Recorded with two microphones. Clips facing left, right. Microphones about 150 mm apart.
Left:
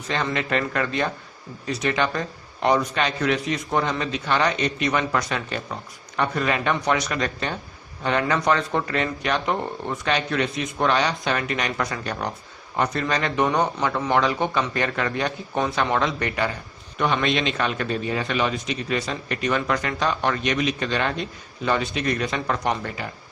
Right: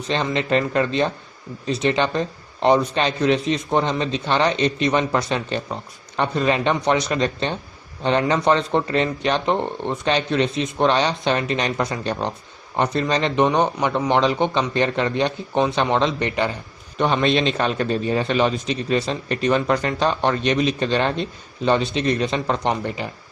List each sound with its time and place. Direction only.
0.3 s a man's voice: 25° right (ahead or behind)